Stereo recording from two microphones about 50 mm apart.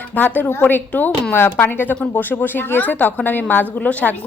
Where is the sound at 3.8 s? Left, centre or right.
Left.